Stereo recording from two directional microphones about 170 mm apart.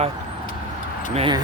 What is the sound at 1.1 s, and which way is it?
Speech, 30° right (ahead or behind).